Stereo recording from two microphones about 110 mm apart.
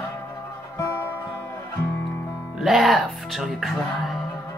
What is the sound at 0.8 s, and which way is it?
Music, 15° left (ahead or behind).